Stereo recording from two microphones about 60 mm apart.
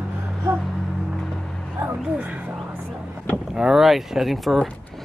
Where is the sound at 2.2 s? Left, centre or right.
Right.